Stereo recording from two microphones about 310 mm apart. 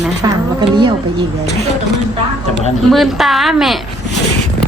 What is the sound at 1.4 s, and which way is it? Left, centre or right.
Speech, left.